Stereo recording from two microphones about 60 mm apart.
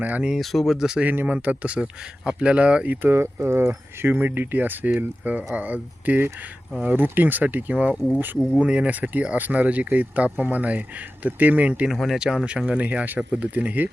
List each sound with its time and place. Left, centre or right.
0.0 s speech: right
0.3 s speech: centre
0.8 s speech: centre
1.0 s speech: right
11.9 s speech: centre
12.5 s speech: centre